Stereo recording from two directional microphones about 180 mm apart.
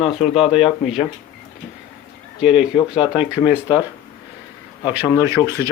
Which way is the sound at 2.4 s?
5° right (ahead or behind).